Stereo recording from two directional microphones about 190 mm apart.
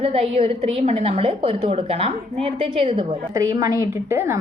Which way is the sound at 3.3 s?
20° right (ahead or behind).